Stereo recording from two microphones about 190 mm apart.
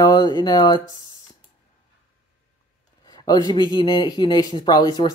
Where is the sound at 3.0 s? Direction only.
20° left (ahead or behind).